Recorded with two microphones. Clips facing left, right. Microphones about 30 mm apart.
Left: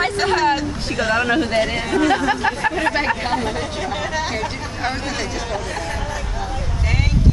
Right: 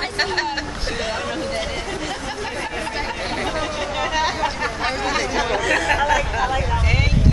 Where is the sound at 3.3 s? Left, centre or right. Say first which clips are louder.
Left 1 dB; centre.